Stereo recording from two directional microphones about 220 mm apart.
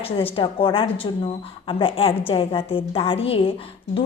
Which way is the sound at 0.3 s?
25° left (ahead or behind).